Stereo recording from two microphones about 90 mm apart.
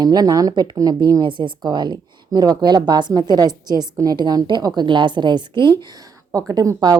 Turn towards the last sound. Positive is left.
turn(degrees=-45)  # may be behind; listen again after turning